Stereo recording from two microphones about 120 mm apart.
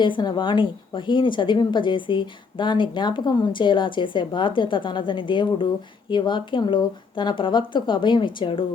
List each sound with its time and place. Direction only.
0.0 s a woman's voice: 40° left (ahead or behind)